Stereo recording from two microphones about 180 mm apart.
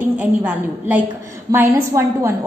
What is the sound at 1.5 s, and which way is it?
Speech, 20° right (ahead or behind).